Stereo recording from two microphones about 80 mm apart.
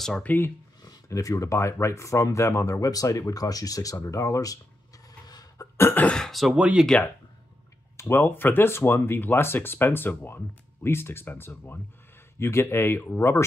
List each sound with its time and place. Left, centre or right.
0.0 s speech: centre
0.8 s a sound: left
1.4 s speech: left
5.2 s hiccup: left
5.8 s cough: left
6.0 s speech: centre
6.5 s speech: centre
8.0 s speech: left